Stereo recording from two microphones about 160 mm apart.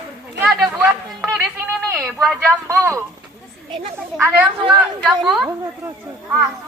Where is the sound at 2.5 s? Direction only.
15° right (ahead or behind).